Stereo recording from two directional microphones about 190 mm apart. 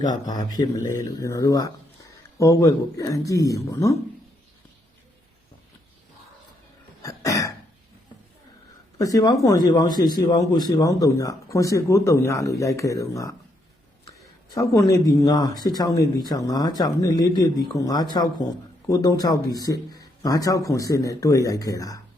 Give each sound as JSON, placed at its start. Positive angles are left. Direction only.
{"t": 0.1, "sound": "speech", "side_deg": 20}
{"t": 7.0, "sound": "cough", "side_deg": 15}
{"t": 9.0, "sound": "speech", "side_deg": 20}
{"t": 14.5, "sound": "speech", "side_deg": 15}